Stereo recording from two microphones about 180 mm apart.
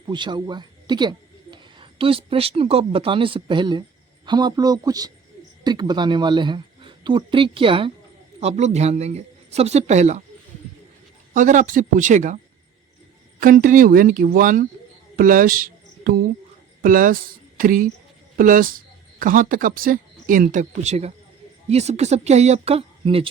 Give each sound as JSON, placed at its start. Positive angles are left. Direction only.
{"t": 0.0, "sound": "a woman's voice", "side_deg": -25}
{"t": 11.3, "sound": "speech", "side_deg": -45}
{"t": 13.4, "sound": "speech", "side_deg": -50}